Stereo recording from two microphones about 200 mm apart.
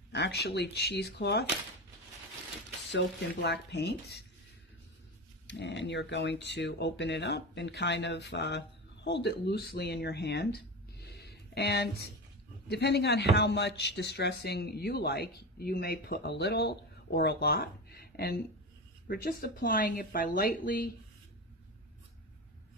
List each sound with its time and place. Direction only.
0.1 s speech: 55° left (ahead or behind)
2.9 s speech: 60° left (ahead or behind)
5.5 s speech: 60° left (ahead or behind); by 20.9 s 45° left (ahead or behind)